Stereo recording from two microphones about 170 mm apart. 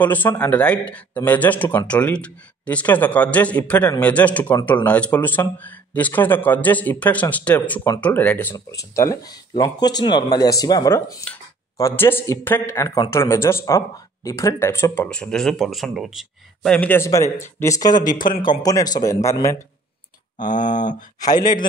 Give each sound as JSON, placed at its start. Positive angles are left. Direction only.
{"t": 0.0, "sound": "a man's voice", "side_deg": 10}
{"t": 20.3, "sound": "speech", "side_deg": 50}
{"t": 21.2, "sound": "speech", "side_deg": 25}